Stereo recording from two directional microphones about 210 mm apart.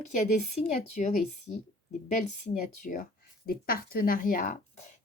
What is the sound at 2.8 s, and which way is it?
Speech, 40° left (ahead or behind).